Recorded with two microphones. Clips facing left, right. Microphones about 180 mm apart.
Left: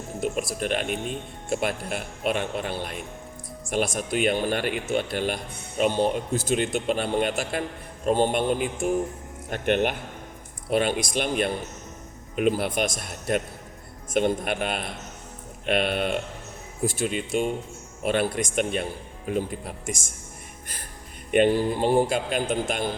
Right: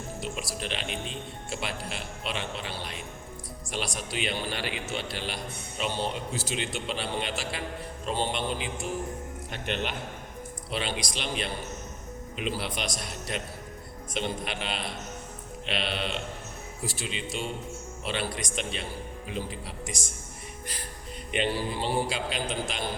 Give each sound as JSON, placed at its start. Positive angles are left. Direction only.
{"t": 0.2, "sound": "a man's voice", "side_deg": 50}
{"t": 21.2, "sound": "a man's voice", "side_deg": 50}